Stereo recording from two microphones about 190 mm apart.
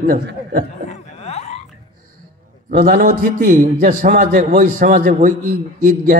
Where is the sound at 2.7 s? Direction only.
45° right (ahead or behind).